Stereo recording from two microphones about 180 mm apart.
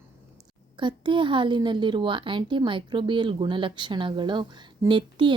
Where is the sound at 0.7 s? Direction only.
25° right (ahead or behind).